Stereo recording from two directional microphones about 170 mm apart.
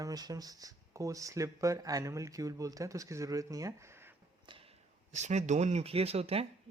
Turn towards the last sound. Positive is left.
turn(degrees=-35)  # may be behind; listen again after turning